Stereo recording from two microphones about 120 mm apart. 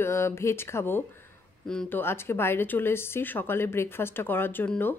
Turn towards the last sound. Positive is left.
turn(degrees=15)  # may be behind; listen again after turning